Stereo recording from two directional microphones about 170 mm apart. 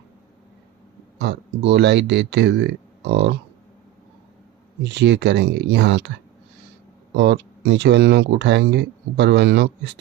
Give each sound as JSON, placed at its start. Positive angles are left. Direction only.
{"t": 1.2, "sound": "speech", "side_deg": -90}
{"t": 4.8, "sound": "speech", "side_deg": -90}
{"t": 7.1, "sound": "speech", "side_deg": -90}